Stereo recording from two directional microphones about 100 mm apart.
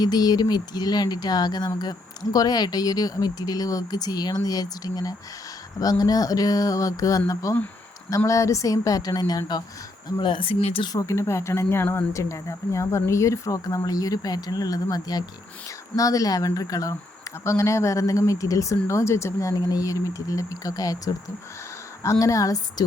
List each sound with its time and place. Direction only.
0.0 s speech: 40° left (ahead or behind)
10.2 s speech: 55° left (ahead or behind); by 10.8 s 80° left
10.8 s speech: 35° left (ahead or behind)